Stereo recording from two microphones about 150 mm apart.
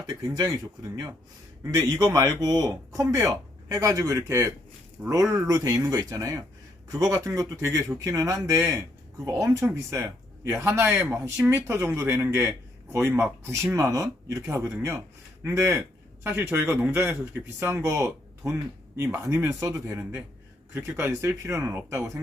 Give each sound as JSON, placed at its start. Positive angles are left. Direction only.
{"t": 0.3, "sound": "speech", "side_deg": -25}
{"t": 2.1, "sound": "a man's voice", "side_deg": -20}